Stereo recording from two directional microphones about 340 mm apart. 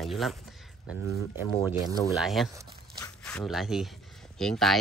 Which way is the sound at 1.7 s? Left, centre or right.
Centre.